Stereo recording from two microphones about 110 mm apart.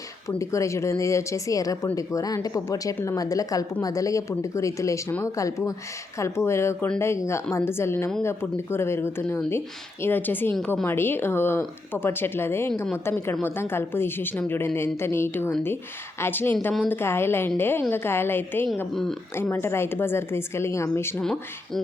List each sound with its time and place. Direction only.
0.3 s speech: 30° left (ahead or behind)
21.2 s speech: 5° left (ahead or behind)